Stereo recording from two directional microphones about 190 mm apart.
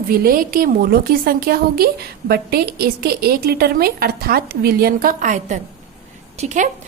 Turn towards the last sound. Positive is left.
turn(degrees=-40)  # may be behind; listen again after turning